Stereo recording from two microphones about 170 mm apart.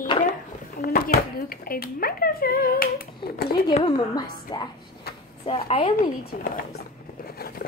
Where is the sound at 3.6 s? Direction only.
30° left (ahead or behind).